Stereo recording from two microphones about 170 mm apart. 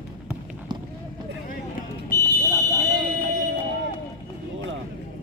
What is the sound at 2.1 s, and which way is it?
Fire alarm, 20° right (ahead or behind).